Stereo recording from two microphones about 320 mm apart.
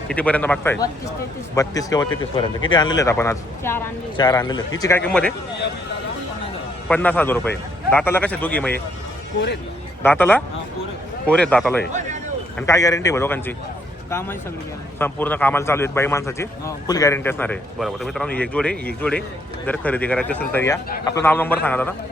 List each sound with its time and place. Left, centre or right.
0.1 s a man's voice: centre
6.8 s a man's voice: centre
10.0 s a man's voice: centre
11.9 s speech: right
12.5 s a man's voice: centre